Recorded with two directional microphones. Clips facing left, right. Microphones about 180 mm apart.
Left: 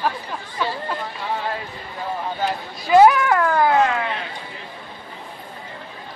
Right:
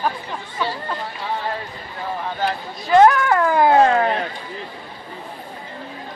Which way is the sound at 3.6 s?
30° right (ahead or behind).